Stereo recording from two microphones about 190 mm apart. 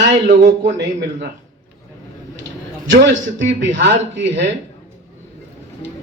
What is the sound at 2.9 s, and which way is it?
A man's voice, 70° right (ahead or behind).